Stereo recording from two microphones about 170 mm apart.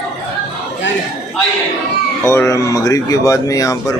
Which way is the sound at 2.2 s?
15° left (ahead or behind).